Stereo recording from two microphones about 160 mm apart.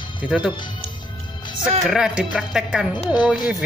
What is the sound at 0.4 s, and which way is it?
Speech, 30° left (ahead or behind).